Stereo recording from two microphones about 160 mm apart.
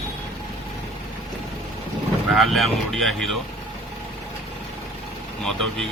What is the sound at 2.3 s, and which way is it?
Speech, centre (ahead or behind).